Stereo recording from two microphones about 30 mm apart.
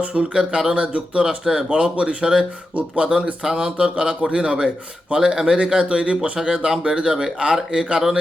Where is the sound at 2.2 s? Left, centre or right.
Right.